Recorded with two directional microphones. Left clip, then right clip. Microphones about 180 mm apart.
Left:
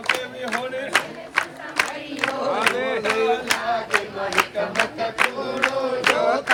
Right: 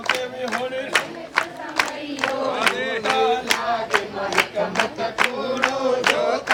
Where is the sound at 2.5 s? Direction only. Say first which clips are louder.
Even; 30° left (ahead or behind).